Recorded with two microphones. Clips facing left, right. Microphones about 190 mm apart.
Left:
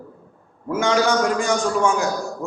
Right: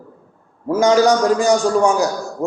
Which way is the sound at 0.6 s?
35° right (ahead or behind).